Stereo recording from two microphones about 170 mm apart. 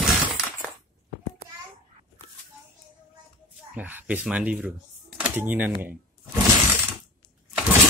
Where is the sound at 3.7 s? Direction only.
10° right (ahead or behind).